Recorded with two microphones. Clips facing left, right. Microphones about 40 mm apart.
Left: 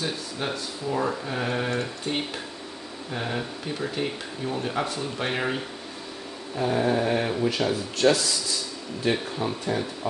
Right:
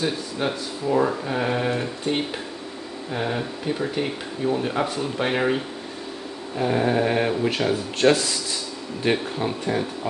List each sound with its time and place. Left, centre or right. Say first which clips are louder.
0.0 s speech: right 5 dB; centre